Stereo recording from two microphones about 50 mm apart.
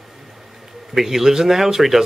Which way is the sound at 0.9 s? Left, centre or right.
Centre.